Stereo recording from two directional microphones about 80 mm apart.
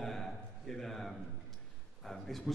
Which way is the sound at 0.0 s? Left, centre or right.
Centre.